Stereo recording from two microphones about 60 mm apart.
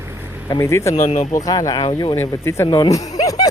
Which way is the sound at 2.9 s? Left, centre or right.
Left.